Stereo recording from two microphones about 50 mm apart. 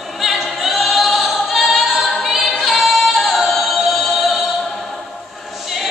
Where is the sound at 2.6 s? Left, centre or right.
Centre.